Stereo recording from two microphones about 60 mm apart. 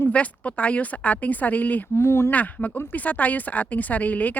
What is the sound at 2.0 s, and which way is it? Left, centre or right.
Speech, left.